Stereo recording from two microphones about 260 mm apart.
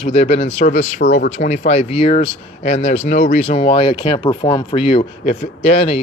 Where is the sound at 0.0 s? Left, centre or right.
Left.